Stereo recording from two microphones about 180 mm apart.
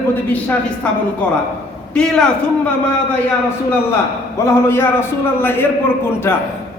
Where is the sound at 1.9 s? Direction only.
5° left (ahead or behind).